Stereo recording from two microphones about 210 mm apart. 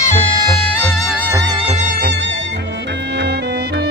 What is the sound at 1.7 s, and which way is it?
Music, 35° right (ahead or behind).